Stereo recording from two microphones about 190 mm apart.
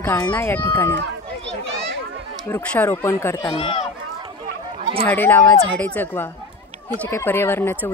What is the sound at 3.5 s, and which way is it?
Speech, 30° left (ahead or behind).